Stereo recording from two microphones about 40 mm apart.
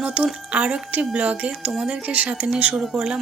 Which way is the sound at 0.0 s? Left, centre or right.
Right.